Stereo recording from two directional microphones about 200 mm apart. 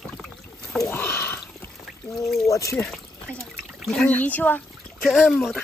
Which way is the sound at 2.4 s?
15° left (ahead or behind).